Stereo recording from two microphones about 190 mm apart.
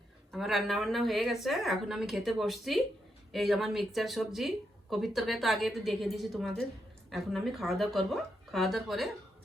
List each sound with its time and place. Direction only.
0.3 s speech: centre (ahead or behind)